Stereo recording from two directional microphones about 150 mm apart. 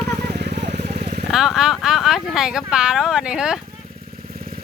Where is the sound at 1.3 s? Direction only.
Centre (ahead or behind).